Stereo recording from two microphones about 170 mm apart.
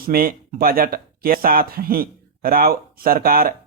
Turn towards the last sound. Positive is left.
turn(degrees=-60)  # may be behind; listen again after turning